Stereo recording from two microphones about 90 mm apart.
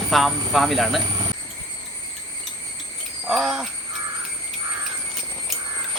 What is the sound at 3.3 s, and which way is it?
Jingle bell, 5° right (ahead or behind).